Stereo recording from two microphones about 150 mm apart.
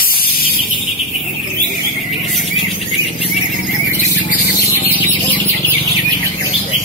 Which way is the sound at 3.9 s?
50° left (ahead or behind).